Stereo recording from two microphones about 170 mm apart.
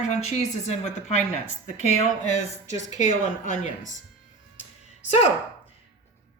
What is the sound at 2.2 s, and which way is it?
Speech, 45° left (ahead or behind).